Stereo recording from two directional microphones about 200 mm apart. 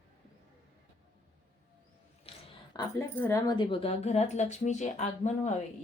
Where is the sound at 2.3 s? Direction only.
20° left (ahead or behind).